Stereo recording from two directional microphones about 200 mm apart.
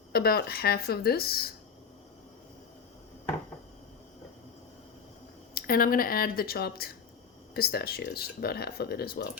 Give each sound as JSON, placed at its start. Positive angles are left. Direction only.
{"t": 0.1, "sound": "speech", "side_deg": 50}
{"t": 5.5, "sound": "speech", "side_deg": 45}